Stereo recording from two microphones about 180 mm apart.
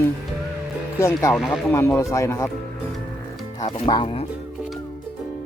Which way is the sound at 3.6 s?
25° left (ahead or behind).